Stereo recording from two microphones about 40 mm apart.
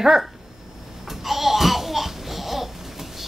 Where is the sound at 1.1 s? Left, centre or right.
Centre.